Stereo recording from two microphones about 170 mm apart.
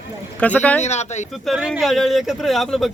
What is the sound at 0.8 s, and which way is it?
Speech, 40° left (ahead or behind).